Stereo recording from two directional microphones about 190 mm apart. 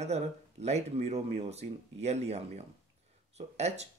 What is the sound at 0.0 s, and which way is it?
Speech, 35° right (ahead or behind).